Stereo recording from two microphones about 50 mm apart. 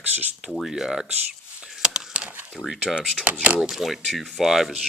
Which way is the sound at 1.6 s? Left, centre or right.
Centre.